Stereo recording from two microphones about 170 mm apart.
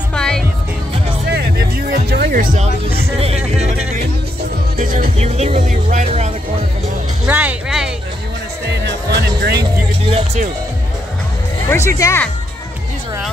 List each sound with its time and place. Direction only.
0.1 s music: 5° left (ahead or behind)
1.3 s music: 65° right (ahead or behind)
4.7 s music: 45° right (ahead or behind)
7.2 s music: 10° right (ahead or behind)
8.6 s music: 75° right (ahead or behind)
10.0 s music: 35° right (ahead or behind)
12.0 s speech: 15° left (ahead or behind)